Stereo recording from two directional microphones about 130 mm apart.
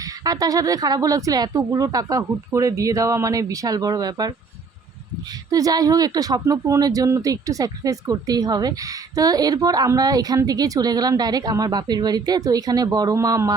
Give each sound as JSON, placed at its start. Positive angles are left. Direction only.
{"t": 0.0, "sound": "speech", "side_deg": -30}
{"t": 5.5, "sound": "speech", "side_deg": -30}